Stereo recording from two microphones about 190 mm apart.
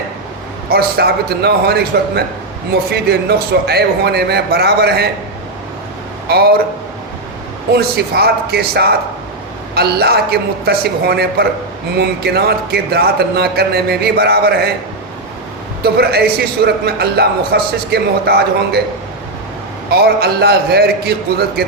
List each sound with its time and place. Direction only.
0.7 s a man's voice: 55° right (ahead or behind)
6.2 s speech: 55° right (ahead or behind)
7.7 s a man's voice: 55° right (ahead or behind)
15.8 s a man's voice: 55° right (ahead or behind)
19.9 s a man's voice: 55° right (ahead or behind)